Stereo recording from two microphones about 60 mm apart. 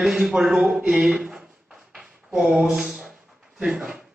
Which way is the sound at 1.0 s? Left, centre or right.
Centre.